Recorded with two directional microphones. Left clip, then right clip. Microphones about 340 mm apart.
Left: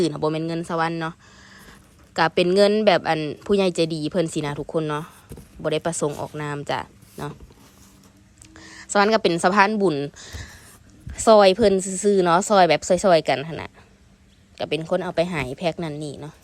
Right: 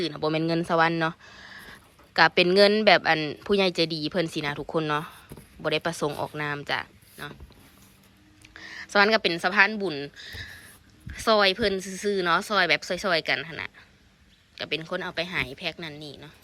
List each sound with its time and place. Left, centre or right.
0.0 s speech: centre
8.5 s a woman's voice: centre